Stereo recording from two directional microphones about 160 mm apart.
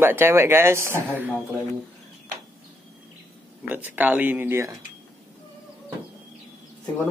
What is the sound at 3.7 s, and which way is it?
Speech, 10° right (ahead or behind).